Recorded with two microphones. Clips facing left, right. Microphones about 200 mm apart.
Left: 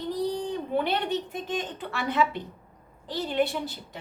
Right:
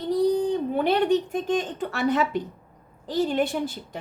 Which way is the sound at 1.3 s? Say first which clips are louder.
Right 7 dB; 45° right (ahead or behind).